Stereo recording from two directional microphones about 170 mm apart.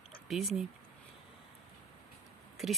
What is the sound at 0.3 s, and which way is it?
Speech, centre (ahead or behind).